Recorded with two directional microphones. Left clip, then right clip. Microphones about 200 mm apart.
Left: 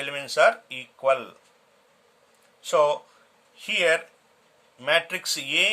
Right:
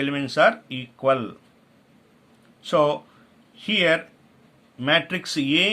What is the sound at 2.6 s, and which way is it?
A man's voice, 15° left (ahead or behind).